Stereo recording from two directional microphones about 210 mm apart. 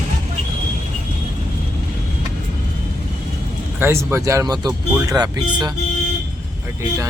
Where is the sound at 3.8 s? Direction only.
10° right (ahead or behind).